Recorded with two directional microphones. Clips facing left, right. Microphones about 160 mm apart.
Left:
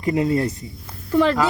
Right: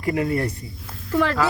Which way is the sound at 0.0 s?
25° left (ahead or behind).